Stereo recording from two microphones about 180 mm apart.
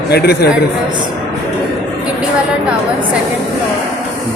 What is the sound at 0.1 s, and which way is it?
Speech, 65° left (ahead or behind).